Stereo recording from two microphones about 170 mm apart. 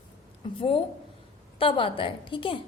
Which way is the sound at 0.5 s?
30° left (ahead or behind).